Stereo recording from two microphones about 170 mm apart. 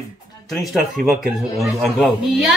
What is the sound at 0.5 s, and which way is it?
Speech, centre (ahead or behind).